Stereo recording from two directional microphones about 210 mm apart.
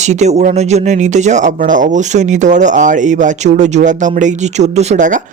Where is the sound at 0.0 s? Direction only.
35° right (ahead or behind).